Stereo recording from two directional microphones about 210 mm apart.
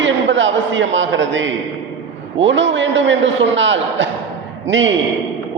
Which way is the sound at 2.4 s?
60° right (ahead or behind).